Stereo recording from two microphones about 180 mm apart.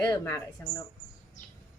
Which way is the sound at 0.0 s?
20° left (ahead or behind).